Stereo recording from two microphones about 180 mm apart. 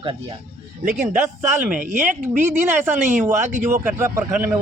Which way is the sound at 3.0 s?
45° right (ahead or behind).